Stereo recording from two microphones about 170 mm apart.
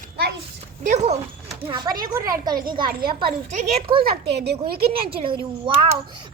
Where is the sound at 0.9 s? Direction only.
40° right (ahead or behind).